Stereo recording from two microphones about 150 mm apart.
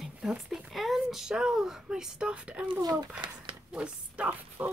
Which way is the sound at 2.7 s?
25° right (ahead or behind).